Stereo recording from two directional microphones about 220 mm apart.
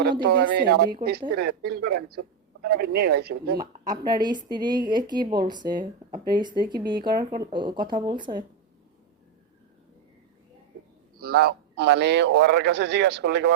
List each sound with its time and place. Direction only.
0.0 s a man's voice: 45° right (ahead or behind)
3.6 s speech: 20° right (ahead or behind)
11.2 s a man's voice: 45° right (ahead or behind)